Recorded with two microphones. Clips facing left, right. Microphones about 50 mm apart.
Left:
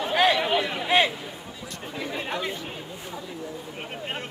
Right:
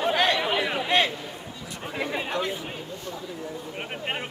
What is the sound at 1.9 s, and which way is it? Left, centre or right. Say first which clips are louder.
Chatter: right 3 dB; right.